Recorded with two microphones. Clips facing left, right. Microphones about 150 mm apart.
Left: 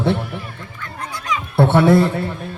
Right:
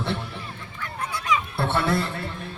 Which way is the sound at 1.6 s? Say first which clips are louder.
Left 15 dB; 55° left (ahead or behind).